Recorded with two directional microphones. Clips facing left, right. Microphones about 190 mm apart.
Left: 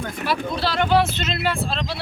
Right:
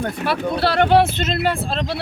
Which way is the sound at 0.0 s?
60° right (ahead or behind).